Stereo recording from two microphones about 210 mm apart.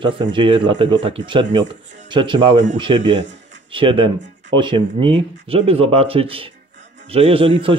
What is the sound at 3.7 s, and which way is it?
Speech, 25° right (ahead or behind).